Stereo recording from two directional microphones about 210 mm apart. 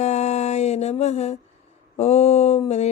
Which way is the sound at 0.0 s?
30° left (ahead or behind).